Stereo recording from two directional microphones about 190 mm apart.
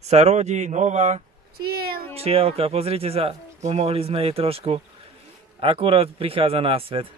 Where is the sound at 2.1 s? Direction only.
30° right (ahead or behind).